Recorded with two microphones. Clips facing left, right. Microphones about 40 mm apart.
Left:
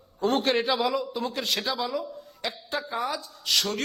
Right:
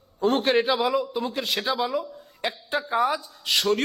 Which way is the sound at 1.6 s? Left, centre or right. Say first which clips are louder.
Right 3 dB; centre.